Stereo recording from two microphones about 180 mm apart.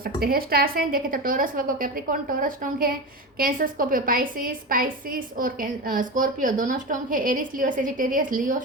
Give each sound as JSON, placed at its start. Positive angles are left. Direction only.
{"t": 0.0, "sound": "a woman's voice", "side_deg": -55}